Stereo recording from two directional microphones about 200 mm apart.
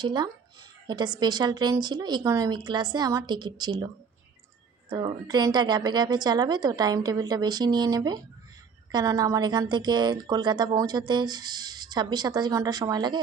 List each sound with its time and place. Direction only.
0.0 s a woman's voice: 20° right (ahead or behind)
4.9 s speech: 20° right (ahead or behind)